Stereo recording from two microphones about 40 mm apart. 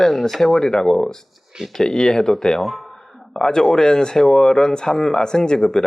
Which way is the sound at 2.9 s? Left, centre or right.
Centre.